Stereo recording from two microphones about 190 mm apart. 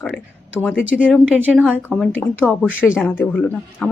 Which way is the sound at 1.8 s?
5° left (ahead or behind).